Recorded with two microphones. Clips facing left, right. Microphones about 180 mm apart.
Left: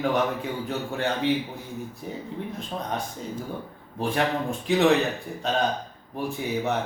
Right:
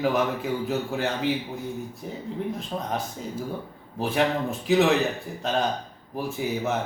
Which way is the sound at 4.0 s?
5° right (ahead or behind).